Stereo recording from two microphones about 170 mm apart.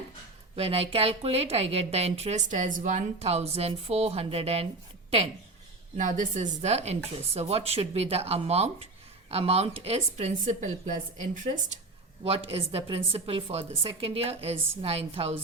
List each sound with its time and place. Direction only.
0.5 s a woman's voice: 35° right (ahead or behind)
6.0 s a woman's voice: 50° right (ahead or behind)